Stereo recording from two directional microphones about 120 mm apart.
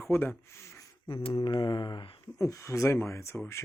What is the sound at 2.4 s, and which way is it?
Speech, 25° left (ahead or behind).